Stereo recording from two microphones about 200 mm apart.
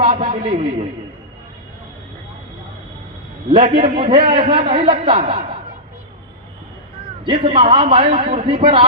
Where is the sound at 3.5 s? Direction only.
25° right (ahead or behind).